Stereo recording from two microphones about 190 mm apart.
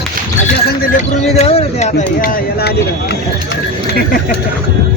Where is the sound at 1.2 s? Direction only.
35° left (ahead or behind); by 4.4 s 55° left (ahead or behind).